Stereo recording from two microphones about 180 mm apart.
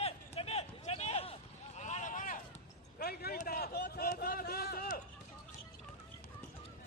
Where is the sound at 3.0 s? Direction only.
60° left (ahead or behind).